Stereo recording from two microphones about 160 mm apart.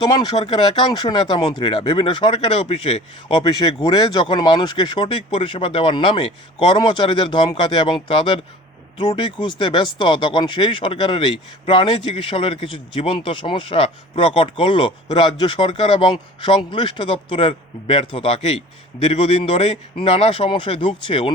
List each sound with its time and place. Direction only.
0.1 s speech: 25° left (ahead or behind)